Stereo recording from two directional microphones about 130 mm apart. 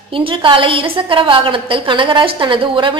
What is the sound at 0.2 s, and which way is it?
A woman's voice, 40° right (ahead or behind).